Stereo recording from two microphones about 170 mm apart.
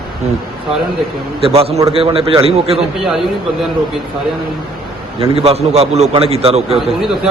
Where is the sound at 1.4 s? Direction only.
35° right (ahead or behind).